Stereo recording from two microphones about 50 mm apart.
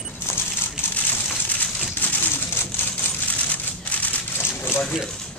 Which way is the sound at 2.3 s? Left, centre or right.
Left.